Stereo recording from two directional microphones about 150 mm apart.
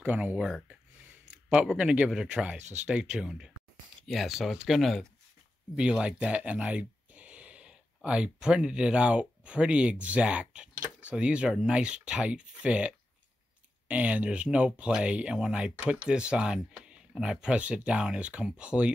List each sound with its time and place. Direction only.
0.0 s speech: 10° right (ahead or behind)